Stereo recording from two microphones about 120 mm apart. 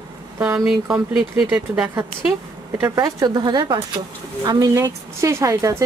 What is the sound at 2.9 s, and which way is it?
A woman's voice, 30° right (ahead or behind).